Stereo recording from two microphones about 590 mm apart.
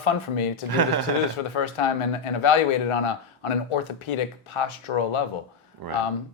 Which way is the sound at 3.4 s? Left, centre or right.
Left.